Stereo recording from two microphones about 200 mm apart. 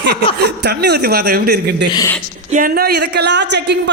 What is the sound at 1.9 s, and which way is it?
Speech, 15° left (ahead or behind).